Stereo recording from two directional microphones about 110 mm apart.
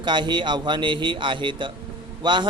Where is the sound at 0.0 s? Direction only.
45° right (ahead or behind).